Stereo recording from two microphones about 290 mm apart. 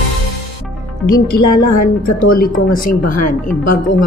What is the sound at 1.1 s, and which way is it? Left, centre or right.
Speech, left.